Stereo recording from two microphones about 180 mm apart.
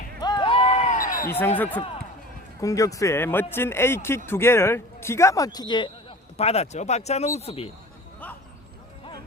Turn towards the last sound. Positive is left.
turn(degrees=35)  # may be behind; listen again after turning